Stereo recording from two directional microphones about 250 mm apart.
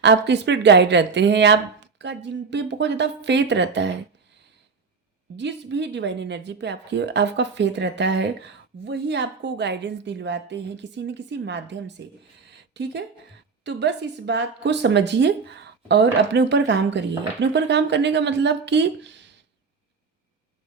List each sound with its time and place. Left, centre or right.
0.0 s speech: right
5.4 s speech: right